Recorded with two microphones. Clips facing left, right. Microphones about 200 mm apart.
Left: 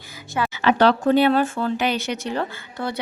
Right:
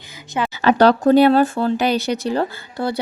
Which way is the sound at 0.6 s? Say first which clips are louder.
Right 4 dB; 40° right (ahead or behind).